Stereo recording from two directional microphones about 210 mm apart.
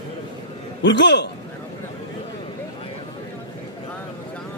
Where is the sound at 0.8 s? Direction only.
60° left (ahead or behind).